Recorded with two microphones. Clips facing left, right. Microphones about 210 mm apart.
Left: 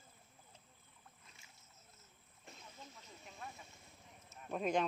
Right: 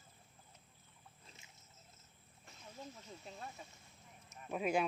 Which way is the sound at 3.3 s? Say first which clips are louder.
Right 6 dB; 35° right (ahead or behind).